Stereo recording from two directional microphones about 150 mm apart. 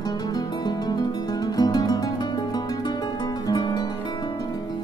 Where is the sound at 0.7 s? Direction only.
25° left (ahead or behind).